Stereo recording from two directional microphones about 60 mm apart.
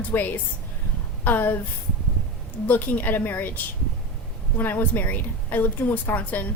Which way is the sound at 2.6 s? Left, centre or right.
Left.